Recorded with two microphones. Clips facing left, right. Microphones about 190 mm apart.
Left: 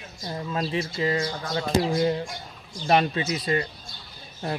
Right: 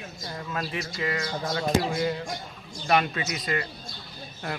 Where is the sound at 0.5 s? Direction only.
25° left (ahead or behind).